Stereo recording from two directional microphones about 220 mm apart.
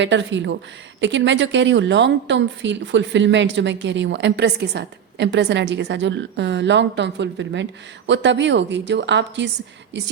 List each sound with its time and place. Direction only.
0.0 s a woman's voice: 55° right (ahead or behind)